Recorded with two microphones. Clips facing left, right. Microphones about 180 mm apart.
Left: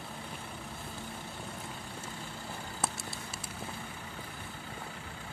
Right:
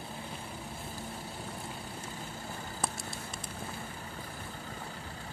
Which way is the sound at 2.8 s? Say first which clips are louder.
Even; 5° left (ahead or behind).